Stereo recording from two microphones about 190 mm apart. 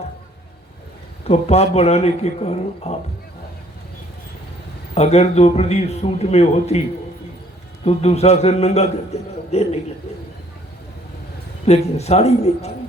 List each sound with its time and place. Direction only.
1.3 s a man's voice: 35° left (ahead or behind)
4.9 s a man's voice: 35° left (ahead or behind)
7.9 s a man's voice: 35° left (ahead or behind)
11.6 s a man's voice: 35° left (ahead or behind)